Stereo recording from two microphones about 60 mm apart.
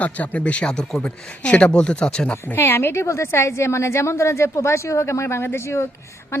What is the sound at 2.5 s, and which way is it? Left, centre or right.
A woman's voice, left.